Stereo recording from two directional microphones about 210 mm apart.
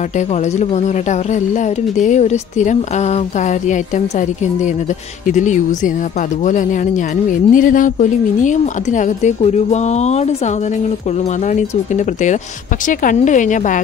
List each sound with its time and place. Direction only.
2.0 s speech: 35° left (ahead or behind)
5.2 s speech: 35° left (ahead or behind)
11.9 s speech: 35° left (ahead or behind)